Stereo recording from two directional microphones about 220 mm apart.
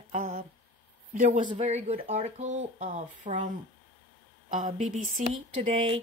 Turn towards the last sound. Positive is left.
turn(degrees=-25)  # may be behind; listen again after turning